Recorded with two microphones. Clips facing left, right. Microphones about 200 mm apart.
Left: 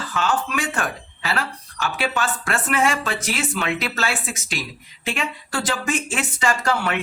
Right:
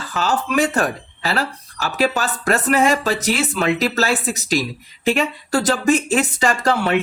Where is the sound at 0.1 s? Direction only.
40° right (ahead or behind).